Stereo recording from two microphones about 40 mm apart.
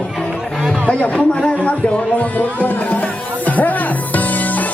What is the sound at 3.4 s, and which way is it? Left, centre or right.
Music, left.